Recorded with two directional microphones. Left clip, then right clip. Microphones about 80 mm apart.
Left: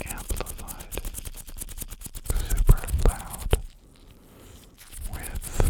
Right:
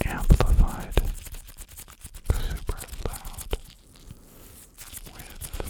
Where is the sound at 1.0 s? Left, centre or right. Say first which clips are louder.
Right 8 dB; right.